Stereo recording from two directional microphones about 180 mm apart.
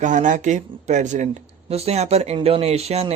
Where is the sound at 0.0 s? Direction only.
45° right (ahead or behind).